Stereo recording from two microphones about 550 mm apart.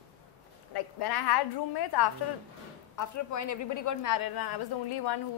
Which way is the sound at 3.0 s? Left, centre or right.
Left.